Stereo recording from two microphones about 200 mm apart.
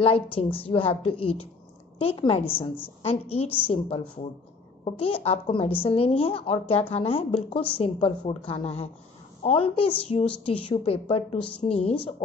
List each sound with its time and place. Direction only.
0.0 s a woman's voice: 30° left (ahead or behind)